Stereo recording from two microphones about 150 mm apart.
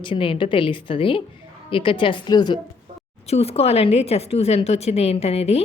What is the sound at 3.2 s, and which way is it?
Speech, 45° left (ahead or behind).